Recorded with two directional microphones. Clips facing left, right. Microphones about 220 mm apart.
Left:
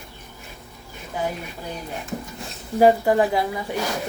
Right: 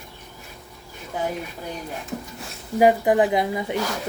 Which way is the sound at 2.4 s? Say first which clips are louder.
Left 1 dB; 15° right (ahead or behind).